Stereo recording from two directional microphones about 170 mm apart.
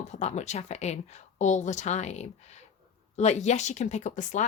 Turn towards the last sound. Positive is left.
turn(degrees=45)  # may be behind; listen again after turning